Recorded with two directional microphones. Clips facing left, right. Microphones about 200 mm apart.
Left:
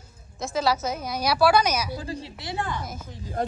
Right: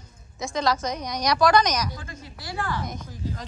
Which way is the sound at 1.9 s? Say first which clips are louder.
Left 7 dB; 35° left (ahead or behind).